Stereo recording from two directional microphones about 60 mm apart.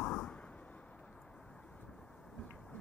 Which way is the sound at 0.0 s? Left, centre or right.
Centre.